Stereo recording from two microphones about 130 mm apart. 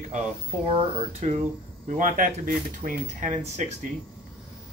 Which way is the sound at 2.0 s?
90° right.